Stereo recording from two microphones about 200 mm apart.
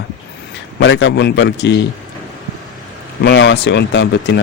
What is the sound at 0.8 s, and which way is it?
Speech, 70° left (ahead or behind).